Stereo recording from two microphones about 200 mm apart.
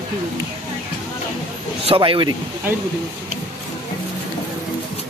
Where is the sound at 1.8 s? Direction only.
25° right (ahead or behind).